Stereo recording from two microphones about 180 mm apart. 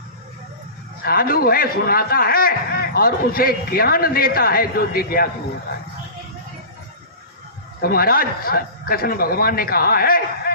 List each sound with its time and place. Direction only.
1.0 s a man's voice: 55° left (ahead or behind)
7.8 s a man's voice: 55° left (ahead or behind)